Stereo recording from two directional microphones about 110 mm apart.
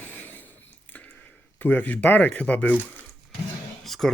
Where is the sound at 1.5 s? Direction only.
15° left (ahead or behind).